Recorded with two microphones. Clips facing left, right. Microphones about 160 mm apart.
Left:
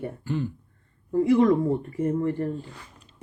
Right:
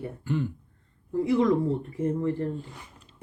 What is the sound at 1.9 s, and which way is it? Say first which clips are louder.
Speech: left 2 dB; centre (ahead or behind).